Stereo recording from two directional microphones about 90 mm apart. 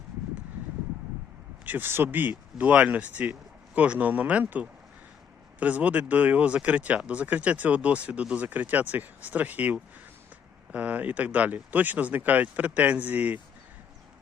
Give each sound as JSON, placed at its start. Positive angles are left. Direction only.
{"t": 1.6, "sound": "speech", "side_deg": -20}